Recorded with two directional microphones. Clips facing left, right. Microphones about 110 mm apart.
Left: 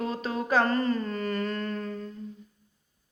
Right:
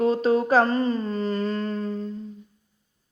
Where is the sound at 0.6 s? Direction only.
20° right (ahead or behind).